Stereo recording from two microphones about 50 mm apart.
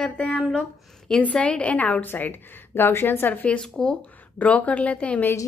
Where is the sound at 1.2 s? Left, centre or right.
Left.